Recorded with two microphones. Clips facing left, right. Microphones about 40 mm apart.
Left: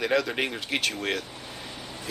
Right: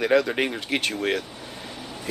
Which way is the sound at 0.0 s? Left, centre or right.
Centre.